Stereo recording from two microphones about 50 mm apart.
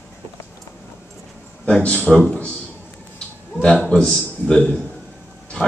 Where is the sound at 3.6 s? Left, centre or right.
Left.